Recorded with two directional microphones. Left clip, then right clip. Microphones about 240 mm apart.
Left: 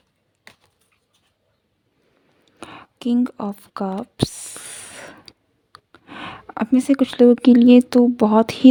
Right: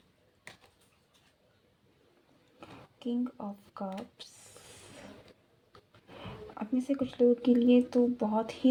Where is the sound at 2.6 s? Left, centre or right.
Left.